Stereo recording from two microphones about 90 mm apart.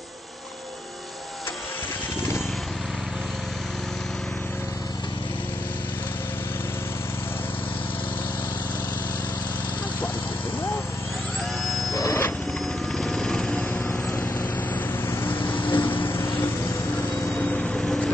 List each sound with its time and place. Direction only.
11.9 s wild animals: 40° left (ahead or behind)
12.9 s helicopter: 5° left (ahead or behind)
15.0 s vehicle: 20° left (ahead or behind)
17.4 s vehicle: 10° left (ahead or behind)